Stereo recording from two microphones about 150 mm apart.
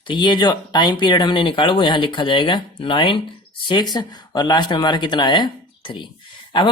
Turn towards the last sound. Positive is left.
turn(degrees=35)  # may be behind; listen again after turning